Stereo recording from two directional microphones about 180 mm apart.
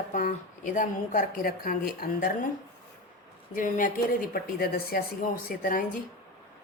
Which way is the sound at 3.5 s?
50° left (ahead or behind).